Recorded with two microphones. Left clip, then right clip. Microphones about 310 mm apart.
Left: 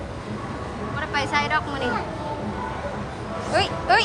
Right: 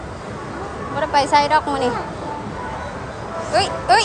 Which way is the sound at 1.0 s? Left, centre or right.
Centre.